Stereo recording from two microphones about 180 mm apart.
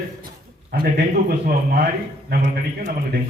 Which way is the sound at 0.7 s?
55° right (ahead or behind).